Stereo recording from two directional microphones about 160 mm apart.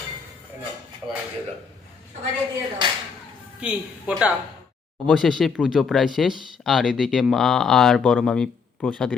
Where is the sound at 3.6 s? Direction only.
10° right (ahead or behind).